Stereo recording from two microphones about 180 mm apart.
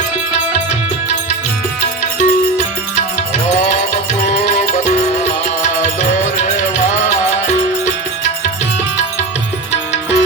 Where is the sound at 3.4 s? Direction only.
40° left (ahead or behind).